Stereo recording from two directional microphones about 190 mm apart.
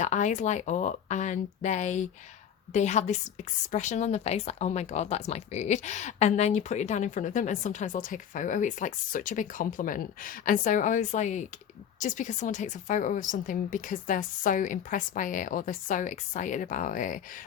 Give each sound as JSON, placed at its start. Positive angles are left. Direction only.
{"t": 0.0, "sound": "speech", "side_deg": 40}